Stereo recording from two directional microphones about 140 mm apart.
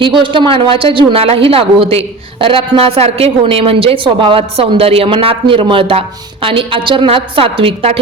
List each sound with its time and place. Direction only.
0.2 s speech: 35° right (ahead or behind)